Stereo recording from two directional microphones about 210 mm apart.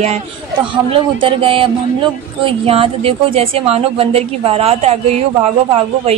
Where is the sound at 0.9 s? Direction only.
25° right (ahead or behind).